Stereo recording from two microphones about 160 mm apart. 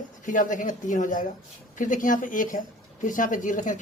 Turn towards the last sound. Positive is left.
turn(degrees=55)  # may be behind; listen again after turning